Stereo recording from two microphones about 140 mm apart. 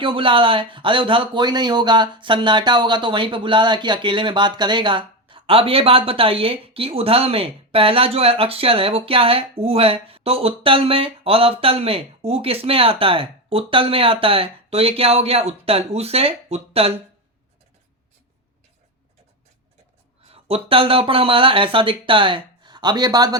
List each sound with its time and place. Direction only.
0.0 s speech: 40° right (ahead or behind)
20.3 s speech: 40° right (ahead or behind)